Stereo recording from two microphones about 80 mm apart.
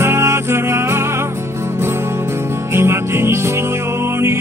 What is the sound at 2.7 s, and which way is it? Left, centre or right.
Music, right.